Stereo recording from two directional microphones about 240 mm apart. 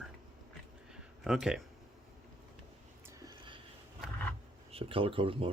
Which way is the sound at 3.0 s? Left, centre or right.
Centre.